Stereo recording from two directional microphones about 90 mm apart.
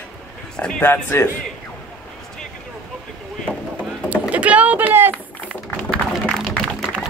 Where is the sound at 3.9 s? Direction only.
15° right (ahead or behind).